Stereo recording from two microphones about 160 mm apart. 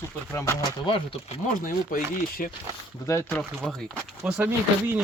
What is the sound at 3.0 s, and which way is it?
Speech, 20° left (ahead or behind).